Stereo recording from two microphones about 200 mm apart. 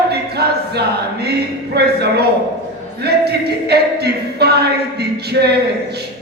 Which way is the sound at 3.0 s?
55° right (ahead or behind).